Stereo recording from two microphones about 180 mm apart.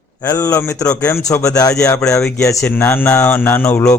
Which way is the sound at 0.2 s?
15° left (ahead or behind).